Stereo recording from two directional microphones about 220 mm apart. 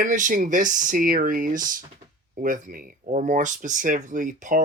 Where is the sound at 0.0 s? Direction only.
35° right (ahead or behind).